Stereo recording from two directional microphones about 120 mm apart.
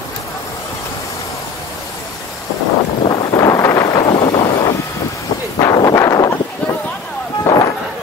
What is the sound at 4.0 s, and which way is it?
Vehicle, 50° left (ahead or behind).